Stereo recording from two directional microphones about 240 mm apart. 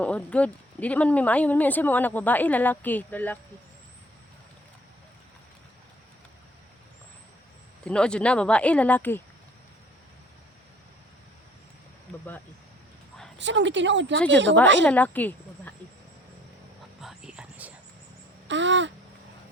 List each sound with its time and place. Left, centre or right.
0.0 s speech: centre
7.9 s speech: centre
13.4 s speech: right
14.8 s speech: centre
17.0 s a sound: centre
18.4 s a sound: right